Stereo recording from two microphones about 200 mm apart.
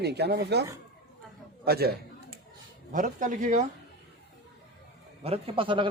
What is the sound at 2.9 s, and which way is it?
Speech, 40° right (ahead or behind).